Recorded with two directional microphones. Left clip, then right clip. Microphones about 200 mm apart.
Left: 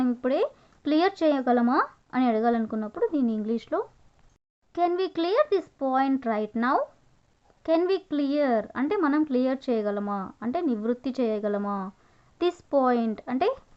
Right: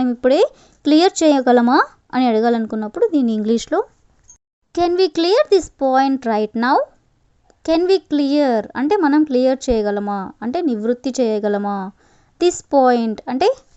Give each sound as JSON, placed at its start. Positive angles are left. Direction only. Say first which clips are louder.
{"t": 0.0, "sound": "a child's voice", "louder": "right 11 dB", "side_deg": -40}